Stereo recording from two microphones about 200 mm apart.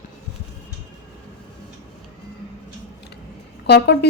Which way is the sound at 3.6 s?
55° left (ahead or behind).